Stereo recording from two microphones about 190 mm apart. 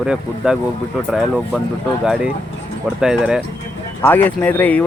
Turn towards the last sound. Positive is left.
turn(degrees=10)  # may be behind; listen again after turning